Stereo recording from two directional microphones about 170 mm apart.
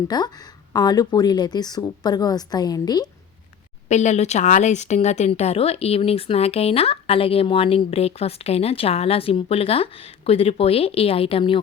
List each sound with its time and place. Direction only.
0.1 s a woman's voice: 25° left (ahead or behind)
3.8 s speech: 45° left (ahead or behind)